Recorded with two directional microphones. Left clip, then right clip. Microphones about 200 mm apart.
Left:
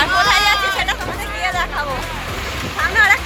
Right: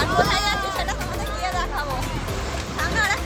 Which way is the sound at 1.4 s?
35° left (ahead or behind).